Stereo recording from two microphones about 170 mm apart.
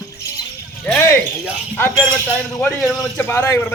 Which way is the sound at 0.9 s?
10° left (ahead or behind).